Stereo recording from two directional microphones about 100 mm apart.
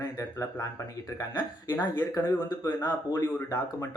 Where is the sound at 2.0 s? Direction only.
40° left (ahead or behind).